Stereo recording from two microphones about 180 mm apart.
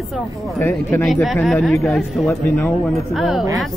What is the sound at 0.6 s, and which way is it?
Speech, 10° left (ahead or behind).